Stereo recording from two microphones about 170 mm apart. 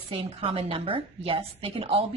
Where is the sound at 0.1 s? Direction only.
35° right (ahead or behind).